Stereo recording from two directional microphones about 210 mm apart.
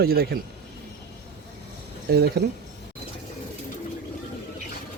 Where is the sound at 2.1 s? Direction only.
50° right (ahead or behind).